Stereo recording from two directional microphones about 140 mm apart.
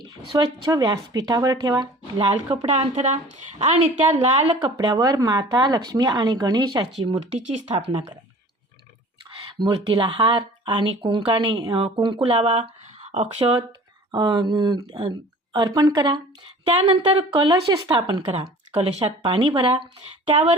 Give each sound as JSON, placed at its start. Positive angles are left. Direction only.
{"t": 0.0, "sound": "speech", "side_deg": -30}
{"t": 4.8, "sound": "speech", "side_deg": -30}
{"t": 7.2, "sound": "speech", "side_deg": -55}
{"t": 9.4, "sound": "speech", "side_deg": -35}
{"t": 11.5, "sound": "speech", "side_deg": -25}
{"t": 14.1, "sound": "speech", "side_deg": -30}